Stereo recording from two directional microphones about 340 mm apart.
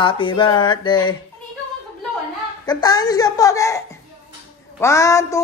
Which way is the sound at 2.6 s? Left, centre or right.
Centre.